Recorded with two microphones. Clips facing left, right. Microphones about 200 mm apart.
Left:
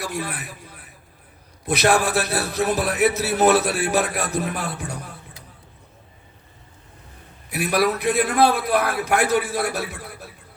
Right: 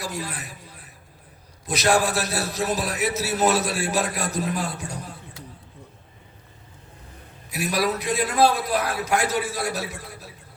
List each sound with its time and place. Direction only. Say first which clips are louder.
0.0 s a man's voice: left 3 dB; 60° left (ahead or behind)
7.5 s a man's voice: left 3 dB; 60° left (ahead or behind)